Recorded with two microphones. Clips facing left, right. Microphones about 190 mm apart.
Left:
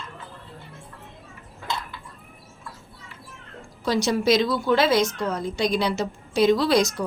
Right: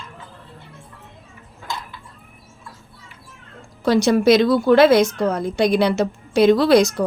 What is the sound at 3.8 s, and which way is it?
Speech, 60° right (ahead or behind).